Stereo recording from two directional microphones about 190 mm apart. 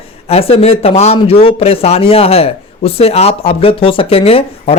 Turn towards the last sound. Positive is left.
turn(degrees=30)  # may be behind; listen again after turning